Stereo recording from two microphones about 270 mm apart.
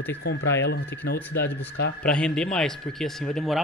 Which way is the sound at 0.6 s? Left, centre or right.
Left.